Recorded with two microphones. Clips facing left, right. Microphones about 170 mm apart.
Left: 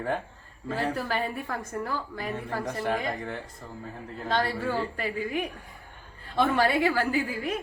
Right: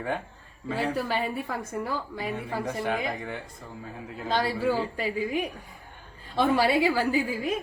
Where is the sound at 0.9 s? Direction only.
10° right (ahead or behind).